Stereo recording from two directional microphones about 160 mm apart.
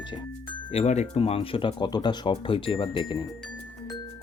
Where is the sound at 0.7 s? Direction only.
45° left (ahead or behind).